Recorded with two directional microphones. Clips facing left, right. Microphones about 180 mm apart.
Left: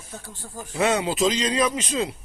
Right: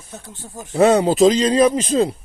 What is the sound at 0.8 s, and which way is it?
A man's voice, 35° right (ahead or behind).